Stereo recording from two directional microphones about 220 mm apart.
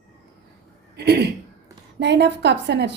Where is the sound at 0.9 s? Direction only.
45° right (ahead or behind).